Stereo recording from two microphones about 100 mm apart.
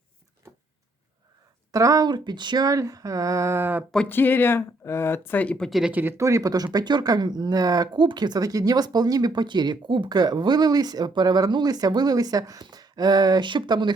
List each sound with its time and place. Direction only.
1.7 s speech: 35° right (ahead or behind)
4.1 s speech: 20° left (ahead or behind)
5.8 s speech: 15° right (ahead or behind)
6.1 s speech: 30° right (ahead or behind); by 13.9 s 50° right (ahead or behind)